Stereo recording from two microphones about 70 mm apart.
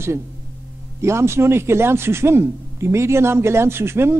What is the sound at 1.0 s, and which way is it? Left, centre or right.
Speech, right.